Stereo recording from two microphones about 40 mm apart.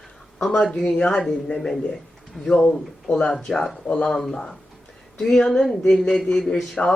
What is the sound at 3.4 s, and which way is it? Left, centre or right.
Speech, centre.